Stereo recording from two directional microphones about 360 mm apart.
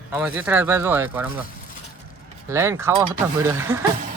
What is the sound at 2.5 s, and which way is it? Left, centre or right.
Speech, centre.